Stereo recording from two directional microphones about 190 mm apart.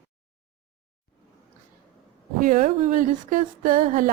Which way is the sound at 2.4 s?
45° right (ahead or behind).